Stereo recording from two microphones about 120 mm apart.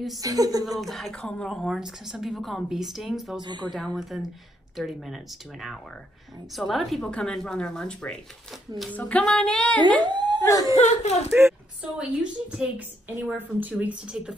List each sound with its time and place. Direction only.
0.2 s a woman's voice: 30° right (ahead or behind)
0.7 s a woman's voice: centre (ahead or behind)
3.3 s a woman's voice: 40° right (ahead or behind)
3.7 s a woman's voice: centre (ahead or behind)
9.8 s dog: 40° right (ahead or behind)
10.4 s speech: 30° left (ahead or behind)
10.8 s speech: 65° left (ahead or behind)
11.3 s a sound: 20° right (ahead or behind)
12.0 s a woman's voice: 5° right (ahead or behind)